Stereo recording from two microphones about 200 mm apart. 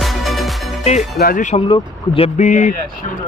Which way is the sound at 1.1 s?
45° left (ahead or behind).